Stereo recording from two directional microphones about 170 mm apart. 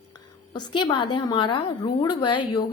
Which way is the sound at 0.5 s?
25° left (ahead or behind).